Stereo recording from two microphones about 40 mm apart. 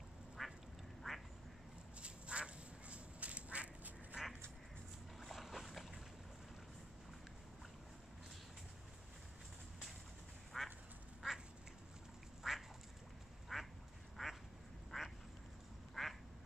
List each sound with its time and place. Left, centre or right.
0.4 s duck: centre
1.0 s quack: centre
2.0 s duck: right
5.2 s boat: centre
10.5 s duck: centre
12.4 s quack: centre